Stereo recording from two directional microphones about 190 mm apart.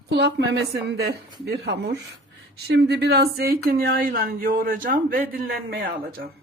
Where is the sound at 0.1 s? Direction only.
65° right (ahead or behind).